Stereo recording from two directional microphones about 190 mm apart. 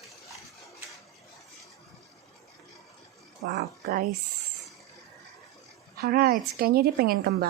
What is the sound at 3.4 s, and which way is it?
Speech, 55° right (ahead or behind).